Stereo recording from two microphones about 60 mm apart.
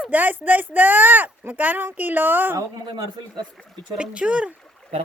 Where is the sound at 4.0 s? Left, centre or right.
Centre.